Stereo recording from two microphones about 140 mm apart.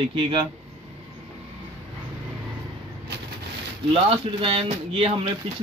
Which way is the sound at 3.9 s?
45° right (ahead or behind).